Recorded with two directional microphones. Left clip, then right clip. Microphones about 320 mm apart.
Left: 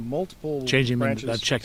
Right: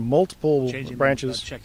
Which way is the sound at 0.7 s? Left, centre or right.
Left.